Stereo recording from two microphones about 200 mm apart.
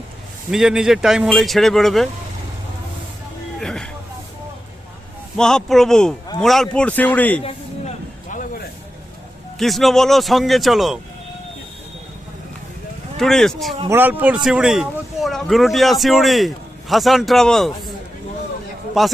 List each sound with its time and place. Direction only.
0.5 s speech: 5° right (ahead or behind)
3.6 s a sound: 5° left (ahead or behind)
5.4 s speech: 5° left (ahead or behind)
7.4 s a sound: 35° left (ahead or behind)
9.6 s speech: centre (ahead or behind)
13.1 s speech: centre (ahead or behind)
13.8 s speech: 10° right (ahead or behind)
19.0 s speech: centre (ahead or behind)